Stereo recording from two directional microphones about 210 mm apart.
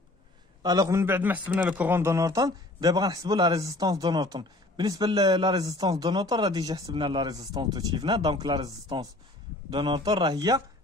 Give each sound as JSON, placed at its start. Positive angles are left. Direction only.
{"t": 0.6, "sound": "a man's voice", "side_deg": -15}